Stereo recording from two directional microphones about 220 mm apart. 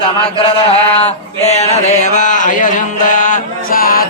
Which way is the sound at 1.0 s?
30° left (ahead or behind).